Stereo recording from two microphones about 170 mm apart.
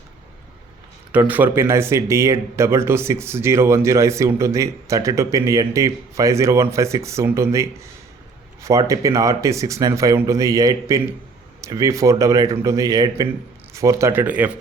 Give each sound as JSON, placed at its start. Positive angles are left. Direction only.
{"t": 1.3, "sound": "speech", "side_deg": -10}